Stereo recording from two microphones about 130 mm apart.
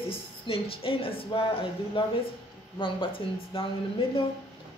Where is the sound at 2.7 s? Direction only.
40° left (ahead or behind).